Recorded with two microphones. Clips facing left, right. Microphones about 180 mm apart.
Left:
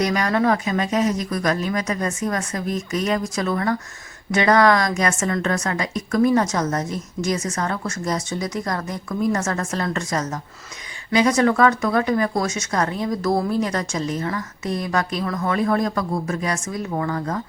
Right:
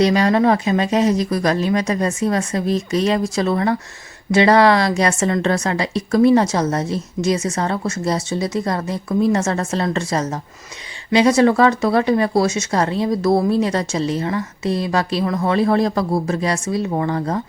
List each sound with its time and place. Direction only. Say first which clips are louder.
0.0 s speech: right 5 dB; 30° right (ahead or behind)